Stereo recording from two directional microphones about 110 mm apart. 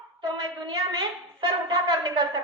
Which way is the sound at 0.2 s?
45° right (ahead or behind).